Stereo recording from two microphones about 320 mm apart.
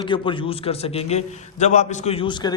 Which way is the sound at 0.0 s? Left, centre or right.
Centre.